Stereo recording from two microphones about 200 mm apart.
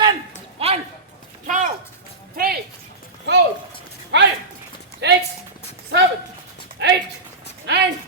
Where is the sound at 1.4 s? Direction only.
40° right (ahead or behind).